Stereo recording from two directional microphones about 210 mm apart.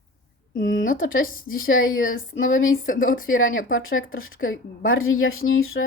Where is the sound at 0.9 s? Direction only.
40° left (ahead or behind).